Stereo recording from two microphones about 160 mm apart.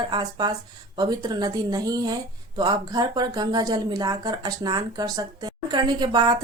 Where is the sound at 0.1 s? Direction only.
25° right (ahead or behind).